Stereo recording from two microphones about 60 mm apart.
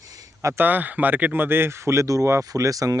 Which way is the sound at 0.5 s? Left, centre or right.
Right.